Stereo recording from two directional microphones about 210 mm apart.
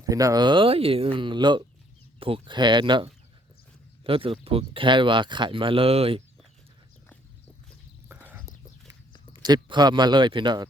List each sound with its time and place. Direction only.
0.0 s speech: 15° right (ahead or behind)
8.0 s whispering: 10° right (ahead or behind)
9.3 s speech: 20° right (ahead or behind)